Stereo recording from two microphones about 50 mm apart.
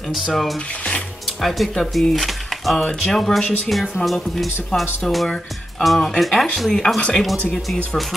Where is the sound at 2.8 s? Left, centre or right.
Centre.